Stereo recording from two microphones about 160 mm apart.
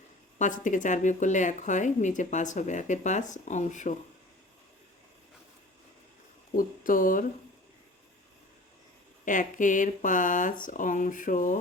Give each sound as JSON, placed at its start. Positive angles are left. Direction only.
{"t": 0.3, "sound": "speech", "side_deg": 50}
{"t": 6.6, "sound": "speech", "side_deg": 60}
{"t": 9.2, "sound": "speech", "side_deg": 55}